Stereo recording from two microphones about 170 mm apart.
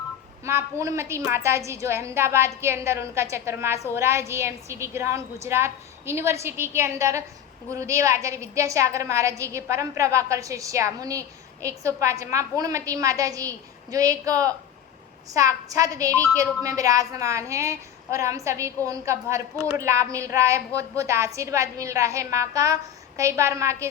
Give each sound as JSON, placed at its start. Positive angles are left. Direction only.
{"t": 0.4, "sound": "a woman's voice", "side_deg": -15}